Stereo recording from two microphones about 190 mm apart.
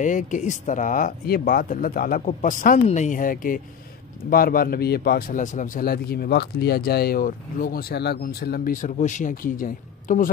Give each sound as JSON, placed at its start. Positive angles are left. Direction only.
{"t": 0.0, "sound": "a man's voice", "side_deg": 40}